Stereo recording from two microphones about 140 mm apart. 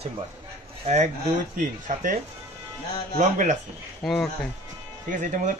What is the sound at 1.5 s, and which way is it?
Speech, 70° right (ahead or behind).